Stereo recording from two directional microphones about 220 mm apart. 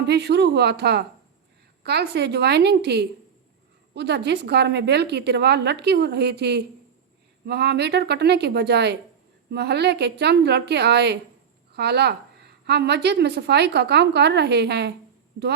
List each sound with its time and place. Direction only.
0.0 s a woman's voice: 50° right (ahead or behind)